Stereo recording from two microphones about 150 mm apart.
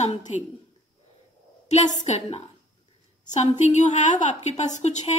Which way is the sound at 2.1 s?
40° left (ahead or behind).